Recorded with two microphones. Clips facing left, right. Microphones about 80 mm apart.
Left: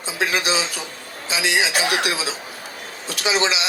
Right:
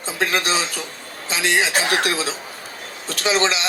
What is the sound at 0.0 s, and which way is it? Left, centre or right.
Speech, right.